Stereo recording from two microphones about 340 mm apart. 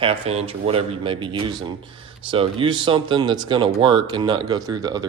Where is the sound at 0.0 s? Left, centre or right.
Centre.